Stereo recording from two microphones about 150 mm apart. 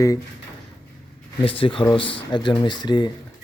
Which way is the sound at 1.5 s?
35° left (ahead or behind).